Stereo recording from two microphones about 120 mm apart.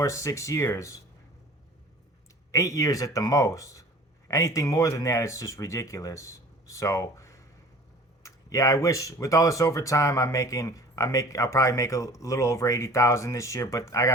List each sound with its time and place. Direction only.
0.0 s speech: 25° left (ahead or behind)
2.5 s speech: 30° left (ahead or behind)